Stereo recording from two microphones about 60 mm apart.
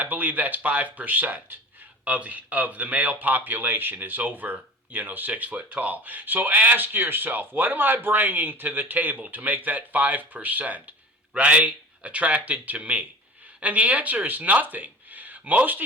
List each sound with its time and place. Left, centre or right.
0.0 s speech: right